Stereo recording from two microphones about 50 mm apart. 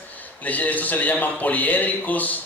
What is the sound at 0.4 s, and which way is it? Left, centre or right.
A man's voice, left.